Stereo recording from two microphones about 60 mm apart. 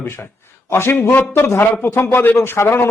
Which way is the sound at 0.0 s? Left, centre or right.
Left.